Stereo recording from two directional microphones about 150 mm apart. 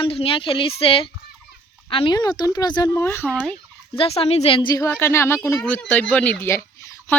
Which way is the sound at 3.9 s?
40° left (ahead or behind).